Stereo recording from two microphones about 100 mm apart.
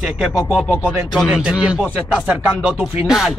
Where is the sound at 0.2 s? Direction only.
Centre (ahead or behind).